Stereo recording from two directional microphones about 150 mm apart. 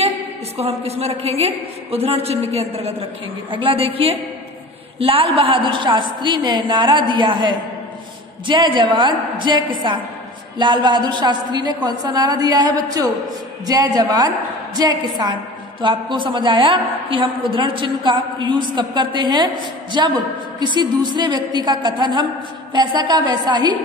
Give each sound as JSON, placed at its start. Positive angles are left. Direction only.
{"t": 0.6, "sound": "a woman's voice", "side_deg": -45}